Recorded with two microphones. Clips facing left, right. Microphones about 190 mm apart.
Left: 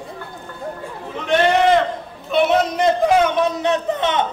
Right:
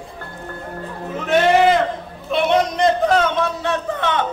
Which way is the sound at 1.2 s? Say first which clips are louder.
Right 1 dB; 5° right (ahead or behind).